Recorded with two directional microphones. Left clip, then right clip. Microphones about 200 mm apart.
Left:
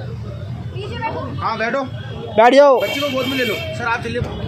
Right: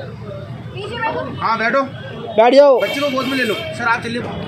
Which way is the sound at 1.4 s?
60° right (ahead or behind).